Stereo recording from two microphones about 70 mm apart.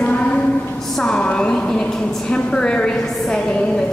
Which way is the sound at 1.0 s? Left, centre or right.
Centre.